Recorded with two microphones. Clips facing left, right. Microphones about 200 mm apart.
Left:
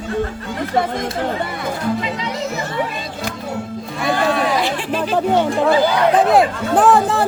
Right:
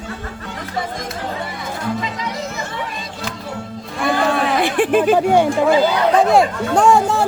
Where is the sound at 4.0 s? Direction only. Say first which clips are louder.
Even; 55° right (ahead or behind).